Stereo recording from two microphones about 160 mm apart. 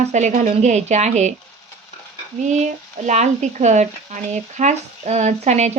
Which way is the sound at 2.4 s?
50° right (ahead or behind).